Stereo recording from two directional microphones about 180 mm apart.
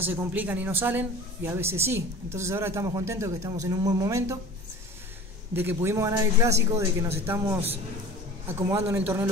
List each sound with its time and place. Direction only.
0.0 s a woman's voice: 10° right (ahead or behind)
5.5 s a woman's voice: 10° right (ahead or behind)